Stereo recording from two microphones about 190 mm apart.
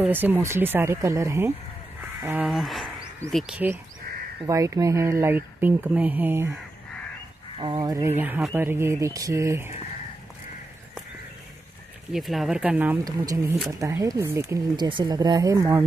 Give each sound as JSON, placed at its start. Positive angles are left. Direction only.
{"t": 0.0, "sound": "speech", "side_deg": -10}
{"t": 4.5, "sound": "speech", "side_deg": -20}
{"t": 7.5, "sound": "speech", "side_deg": -25}
{"t": 12.1, "sound": "speech", "side_deg": 0}